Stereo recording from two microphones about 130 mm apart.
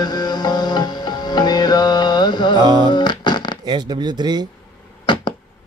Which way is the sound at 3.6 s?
35° right (ahead or behind).